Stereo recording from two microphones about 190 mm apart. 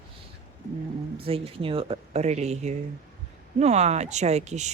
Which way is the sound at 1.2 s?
30° right (ahead or behind).